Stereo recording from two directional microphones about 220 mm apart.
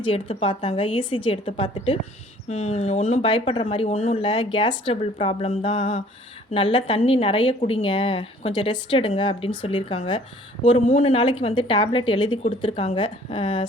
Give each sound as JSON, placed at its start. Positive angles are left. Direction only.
{"t": 0.0, "sound": "a woman's voice", "side_deg": 25}